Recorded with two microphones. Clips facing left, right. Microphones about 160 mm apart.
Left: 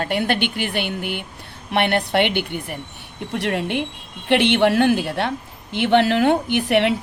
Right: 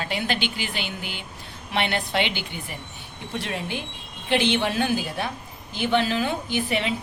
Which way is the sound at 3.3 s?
70° left (ahead or behind).